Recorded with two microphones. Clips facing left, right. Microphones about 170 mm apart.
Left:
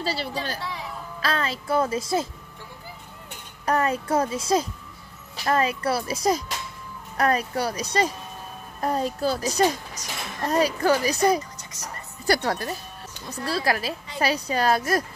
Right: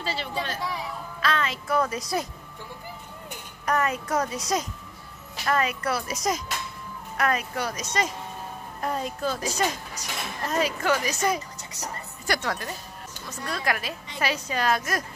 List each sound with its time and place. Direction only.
0.0 s a woman's voice: 35° left (ahead or behind)
3.6 s a woman's voice: 30° left (ahead or behind)